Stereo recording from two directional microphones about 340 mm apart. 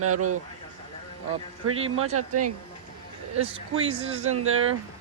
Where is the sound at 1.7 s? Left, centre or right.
Centre.